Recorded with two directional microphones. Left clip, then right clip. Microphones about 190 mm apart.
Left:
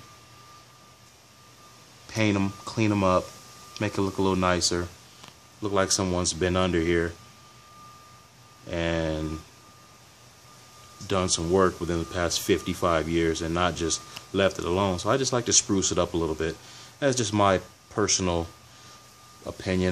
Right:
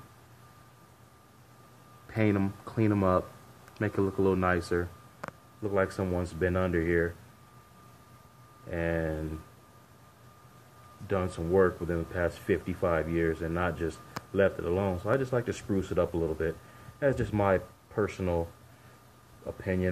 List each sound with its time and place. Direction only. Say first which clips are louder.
2.1 s speech: left 3 dB; 25° left (ahead or behind)
4.2 s speech: left 3 dB; 30° left (ahead or behind)
5.6 s speech: left 4 dB; 40° left (ahead or behind)
8.6 s speech: left 4 dB; 40° left (ahead or behind)
11.1 s speech: left 5 dB; 40° left (ahead or behind)
19.6 s speech: left 4 dB; 40° left (ahead or behind)